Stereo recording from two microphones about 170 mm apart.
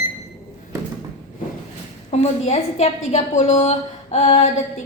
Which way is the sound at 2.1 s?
40° left (ahead or behind).